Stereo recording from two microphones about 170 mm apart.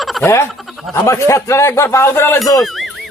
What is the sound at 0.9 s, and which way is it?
A man's voice, 15° left (ahead or behind).